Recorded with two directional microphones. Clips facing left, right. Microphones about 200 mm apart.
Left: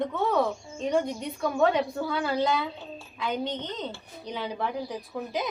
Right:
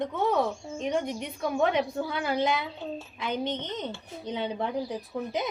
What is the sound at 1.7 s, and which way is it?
A woman's voice, 20° right (ahead or behind).